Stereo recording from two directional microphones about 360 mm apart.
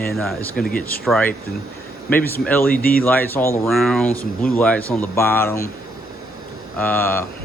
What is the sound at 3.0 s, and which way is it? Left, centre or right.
Speech, centre.